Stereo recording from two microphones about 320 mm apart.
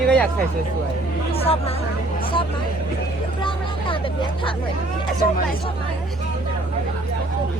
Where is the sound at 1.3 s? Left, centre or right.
Centre.